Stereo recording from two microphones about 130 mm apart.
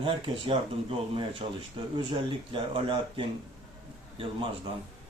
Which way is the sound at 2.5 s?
40° right (ahead or behind).